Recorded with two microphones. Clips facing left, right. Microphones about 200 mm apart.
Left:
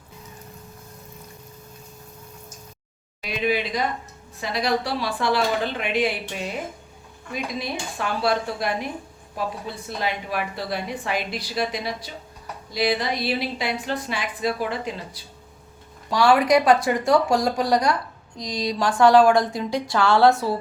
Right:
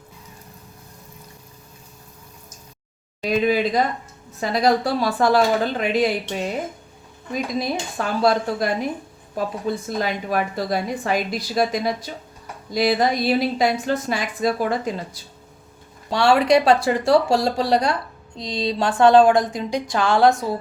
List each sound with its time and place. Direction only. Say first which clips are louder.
3.2 s a woman's voice: right 5 dB; 45° right (ahead or behind)
16.0 s speech: right 1 dB; 25° right (ahead or behind)